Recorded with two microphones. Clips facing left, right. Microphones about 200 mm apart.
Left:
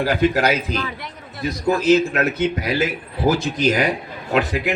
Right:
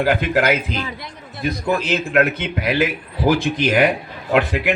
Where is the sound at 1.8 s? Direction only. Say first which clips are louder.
Left 4 dB; 60° right (ahead or behind).